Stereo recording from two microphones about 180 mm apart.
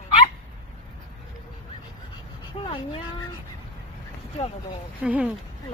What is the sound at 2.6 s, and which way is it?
Vehicle, 30° left (ahead or behind).